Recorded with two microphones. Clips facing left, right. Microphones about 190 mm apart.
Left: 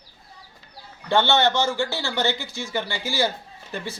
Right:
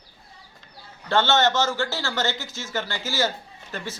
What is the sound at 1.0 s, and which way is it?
A man's voice, 15° left (ahead or behind).